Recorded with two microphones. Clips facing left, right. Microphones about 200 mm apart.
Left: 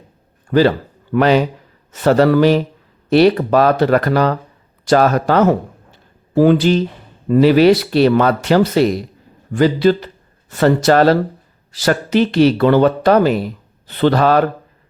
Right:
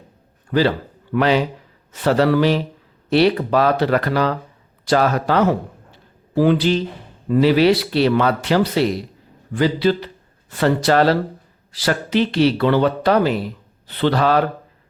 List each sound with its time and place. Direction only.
1.1 s speech: 45° left (ahead or behind)